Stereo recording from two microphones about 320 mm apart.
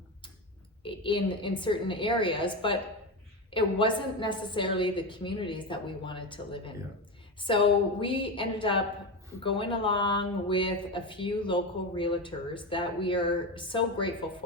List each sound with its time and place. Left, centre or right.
0.8 s speech: centre